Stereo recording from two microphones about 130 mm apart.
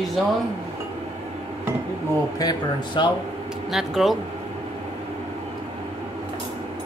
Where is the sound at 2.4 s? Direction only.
30° left (ahead or behind).